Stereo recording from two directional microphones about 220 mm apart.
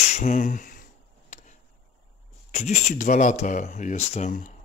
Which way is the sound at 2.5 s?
35° left (ahead or behind).